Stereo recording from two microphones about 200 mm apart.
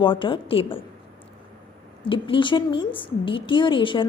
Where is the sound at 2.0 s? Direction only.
25° left (ahead or behind).